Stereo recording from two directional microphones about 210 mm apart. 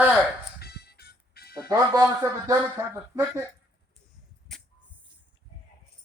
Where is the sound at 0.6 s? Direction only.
50° left (ahead or behind).